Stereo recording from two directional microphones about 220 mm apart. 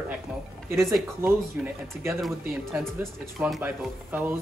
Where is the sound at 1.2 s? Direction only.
10° right (ahead or behind).